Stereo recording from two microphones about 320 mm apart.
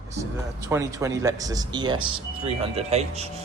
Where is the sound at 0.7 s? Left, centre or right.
Centre.